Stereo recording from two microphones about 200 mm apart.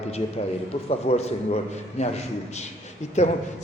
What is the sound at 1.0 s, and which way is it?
Speech, 30° left (ahead or behind).